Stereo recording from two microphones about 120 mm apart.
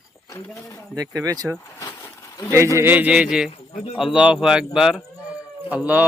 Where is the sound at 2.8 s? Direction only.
15° right (ahead or behind).